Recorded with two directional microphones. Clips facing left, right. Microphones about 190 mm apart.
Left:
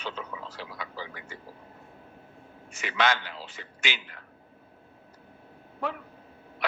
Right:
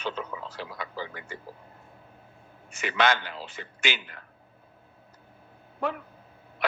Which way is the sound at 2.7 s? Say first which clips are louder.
Right 2 dB; 55° right (ahead or behind).